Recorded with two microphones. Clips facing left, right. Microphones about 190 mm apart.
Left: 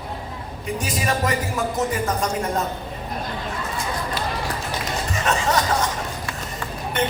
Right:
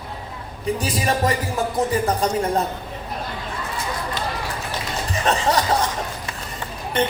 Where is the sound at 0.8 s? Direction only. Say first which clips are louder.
Right 1 dB; 35° right (ahead or behind).